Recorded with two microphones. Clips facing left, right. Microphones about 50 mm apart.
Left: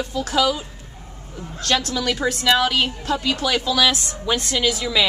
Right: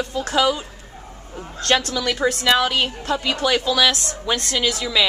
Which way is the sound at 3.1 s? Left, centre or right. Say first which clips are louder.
Right 2 dB; centre.